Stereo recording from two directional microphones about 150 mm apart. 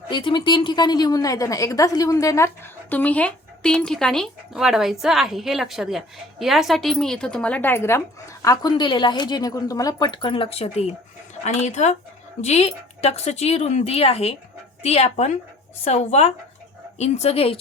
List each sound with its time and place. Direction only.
0.1 s a woman's voice: 30° left (ahead or behind)
2.9 s a woman's voice: 10° left (ahead or behind); by 17.6 s 40° left (ahead or behind)